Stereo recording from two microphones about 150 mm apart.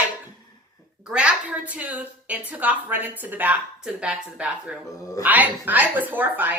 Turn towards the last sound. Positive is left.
turn(degrees=-10)  # may be behind; listen again after turning